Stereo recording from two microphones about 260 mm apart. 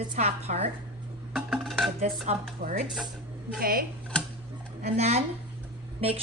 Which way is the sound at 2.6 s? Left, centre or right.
Right.